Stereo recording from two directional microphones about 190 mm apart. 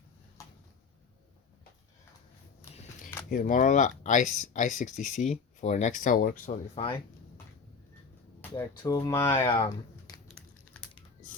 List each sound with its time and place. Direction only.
3.2 s speech: 45° left (ahead or behind)
6.8 s speech: 30° left (ahead or behind)
8.4 s speech: 15° left (ahead or behind)